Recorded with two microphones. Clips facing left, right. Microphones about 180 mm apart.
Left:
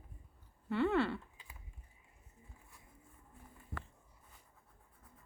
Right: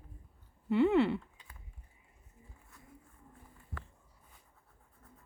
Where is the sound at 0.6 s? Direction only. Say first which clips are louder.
Right 6 dB; 20° right (ahead or behind).